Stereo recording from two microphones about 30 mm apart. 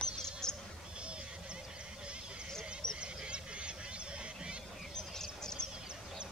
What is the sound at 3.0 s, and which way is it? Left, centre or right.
Goose, right.